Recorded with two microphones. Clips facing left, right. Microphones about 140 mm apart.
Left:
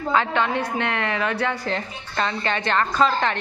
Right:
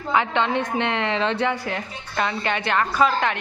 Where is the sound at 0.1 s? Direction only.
20° right (ahead or behind).